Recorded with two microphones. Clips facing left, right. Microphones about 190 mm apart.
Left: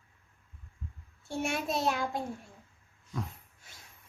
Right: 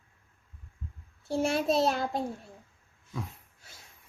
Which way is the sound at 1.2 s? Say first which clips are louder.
Right 6 dB; 35° right (ahead or behind).